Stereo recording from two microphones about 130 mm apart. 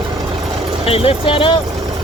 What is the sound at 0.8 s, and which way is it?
Speech, 50° left (ahead or behind).